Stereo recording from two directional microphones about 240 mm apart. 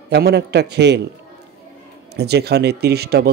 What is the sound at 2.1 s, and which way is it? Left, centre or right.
Speech, right.